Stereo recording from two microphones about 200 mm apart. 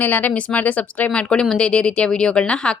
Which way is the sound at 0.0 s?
10° left (ahead or behind).